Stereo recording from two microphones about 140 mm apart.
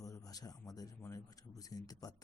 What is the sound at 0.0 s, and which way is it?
Speech, 25° left (ahead or behind).